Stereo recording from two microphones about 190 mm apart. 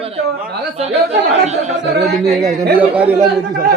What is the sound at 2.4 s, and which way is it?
Speech, 20° right (ahead or behind).